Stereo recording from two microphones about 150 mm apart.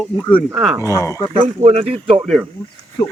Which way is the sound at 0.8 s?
20° left (ahead or behind).